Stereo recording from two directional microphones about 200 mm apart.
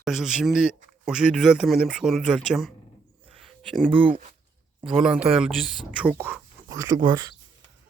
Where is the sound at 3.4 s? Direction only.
Centre (ahead or behind).